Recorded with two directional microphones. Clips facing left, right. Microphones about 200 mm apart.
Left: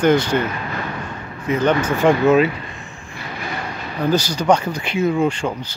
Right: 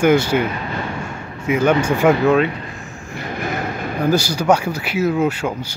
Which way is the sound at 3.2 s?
50° right (ahead or behind).